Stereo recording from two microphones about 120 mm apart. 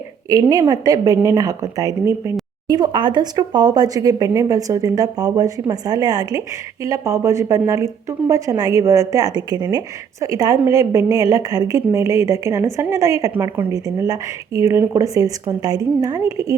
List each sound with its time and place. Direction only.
0.3 s a woman's voice: 30° right (ahead or behind)